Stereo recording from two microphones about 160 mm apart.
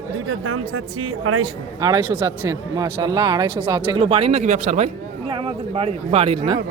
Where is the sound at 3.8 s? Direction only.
35° right (ahead or behind).